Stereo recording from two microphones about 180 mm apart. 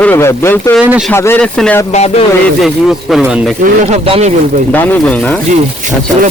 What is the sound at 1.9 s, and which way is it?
Music, 40° left (ahead or behind).